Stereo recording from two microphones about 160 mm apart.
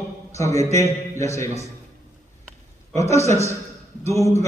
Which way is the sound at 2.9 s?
20° left (ahead or behind).